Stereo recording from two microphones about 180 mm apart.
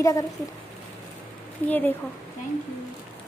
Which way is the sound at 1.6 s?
10° left (ahead or behind).